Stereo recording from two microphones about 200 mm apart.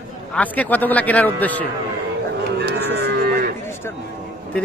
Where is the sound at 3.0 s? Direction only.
50° right (ahead or behind).